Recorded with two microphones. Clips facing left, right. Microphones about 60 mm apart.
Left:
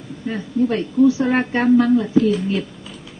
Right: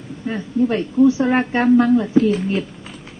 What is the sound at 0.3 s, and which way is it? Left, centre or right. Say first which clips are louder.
Speech: right 1 dB; right.